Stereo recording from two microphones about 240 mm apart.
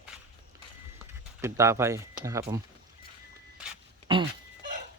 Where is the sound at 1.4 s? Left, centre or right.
Centre.